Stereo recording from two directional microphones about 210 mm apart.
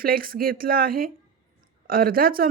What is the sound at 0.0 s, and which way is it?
Speech, 45° right (ahead or behind).